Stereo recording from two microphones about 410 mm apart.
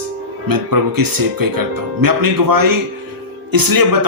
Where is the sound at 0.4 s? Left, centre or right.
Right.